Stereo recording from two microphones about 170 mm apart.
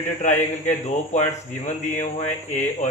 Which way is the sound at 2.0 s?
45° left (ahead or behind).